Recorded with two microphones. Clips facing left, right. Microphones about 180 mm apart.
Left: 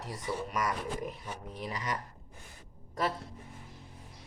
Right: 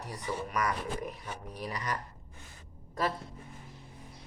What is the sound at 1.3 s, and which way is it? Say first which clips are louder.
Speech: even; 25° left (ahead or behind).